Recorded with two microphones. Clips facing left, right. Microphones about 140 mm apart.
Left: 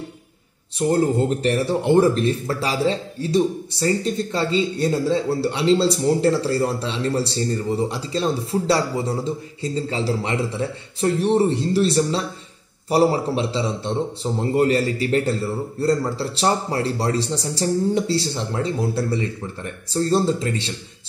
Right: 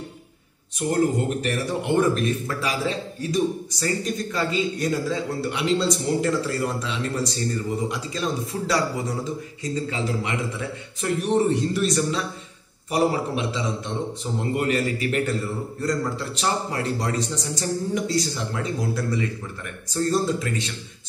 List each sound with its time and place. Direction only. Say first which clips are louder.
0.7 s speech: left 3 dB; 30° left (ahead or behind)